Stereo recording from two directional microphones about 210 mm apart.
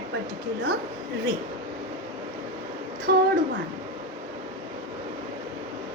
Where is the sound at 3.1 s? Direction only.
50° right (ahead or behind).